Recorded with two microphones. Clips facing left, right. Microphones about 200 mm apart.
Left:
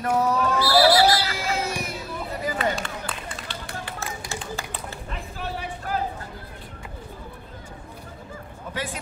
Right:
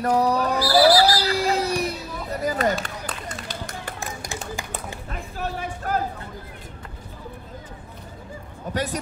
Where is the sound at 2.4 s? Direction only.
40° right (ahead or behind).